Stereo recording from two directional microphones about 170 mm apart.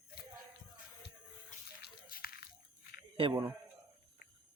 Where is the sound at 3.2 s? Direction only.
30° right (ahead or behind).